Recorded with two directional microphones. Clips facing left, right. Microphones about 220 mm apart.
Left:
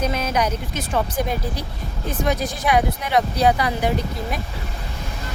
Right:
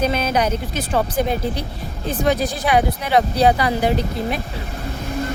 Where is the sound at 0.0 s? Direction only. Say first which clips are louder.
Right 3 dB; 30° right (ahead or behind).